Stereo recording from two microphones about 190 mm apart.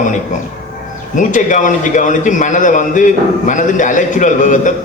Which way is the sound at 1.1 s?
40° left (ahead or behind).